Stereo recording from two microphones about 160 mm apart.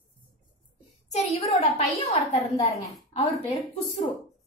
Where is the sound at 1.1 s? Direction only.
40° left (ahead or behind).